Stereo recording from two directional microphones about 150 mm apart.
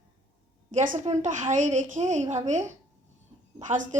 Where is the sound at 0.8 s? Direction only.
55° right (ahead or behind).